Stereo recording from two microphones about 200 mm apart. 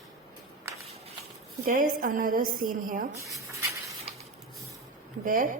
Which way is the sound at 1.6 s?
45° right (ahead or behind).